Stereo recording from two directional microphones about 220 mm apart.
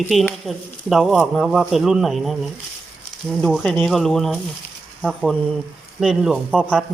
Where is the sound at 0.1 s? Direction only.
Centre (ahead or behind).